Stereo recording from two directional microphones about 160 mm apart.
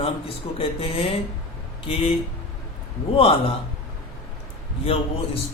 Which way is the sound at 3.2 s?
35° left (ahead or behind).